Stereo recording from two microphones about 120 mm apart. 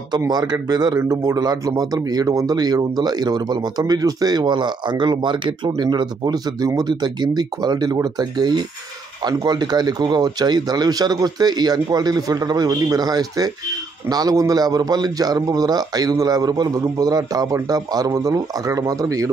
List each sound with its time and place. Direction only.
0.3 s a man's voice: 35° right (ahead or behind)